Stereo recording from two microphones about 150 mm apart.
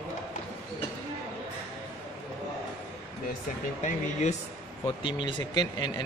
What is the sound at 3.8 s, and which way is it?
Speech, 50° left (ahead or behind).